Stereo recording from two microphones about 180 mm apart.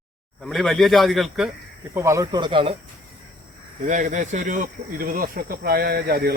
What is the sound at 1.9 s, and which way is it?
Speech, 15° right (ahead or behind).